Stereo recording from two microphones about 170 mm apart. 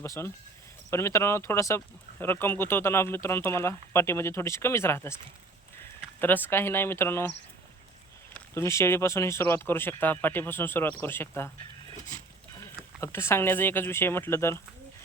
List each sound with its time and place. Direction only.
0.0 s speech: 15° left (ahead or behind)
6.1 s speech: 10° left (ahead or behind)
8.3 s speech: 15° left (ahead or behind)
13.0 s speech: 15° left (ahead or behind)